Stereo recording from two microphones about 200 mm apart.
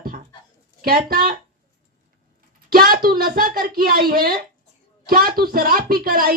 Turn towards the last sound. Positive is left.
turn(degrees=-50)  # may be behind; listen again after turning